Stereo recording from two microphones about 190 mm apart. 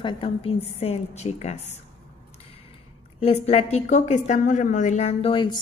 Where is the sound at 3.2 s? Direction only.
30° left (ahead or behind).